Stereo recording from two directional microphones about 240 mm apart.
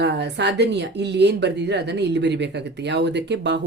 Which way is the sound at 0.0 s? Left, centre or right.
Right.